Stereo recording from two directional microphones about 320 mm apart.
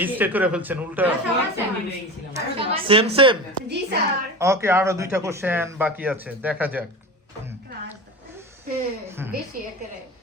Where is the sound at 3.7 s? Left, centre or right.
Right.